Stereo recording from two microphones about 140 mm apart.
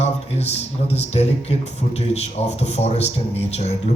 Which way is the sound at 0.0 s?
50° left (ahead or behind).